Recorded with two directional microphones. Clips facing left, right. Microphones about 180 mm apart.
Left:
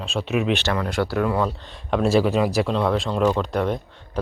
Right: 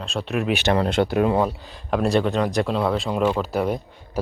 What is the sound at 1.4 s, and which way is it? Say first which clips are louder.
Speech: right 1 dB; centre (ahead or behind).